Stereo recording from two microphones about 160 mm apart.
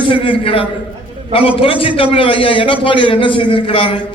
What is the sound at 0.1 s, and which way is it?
A man's voice, 35° left (ahead or behind).